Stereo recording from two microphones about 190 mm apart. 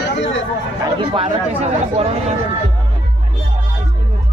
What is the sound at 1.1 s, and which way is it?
Mantra, 30° right (ahead or behind).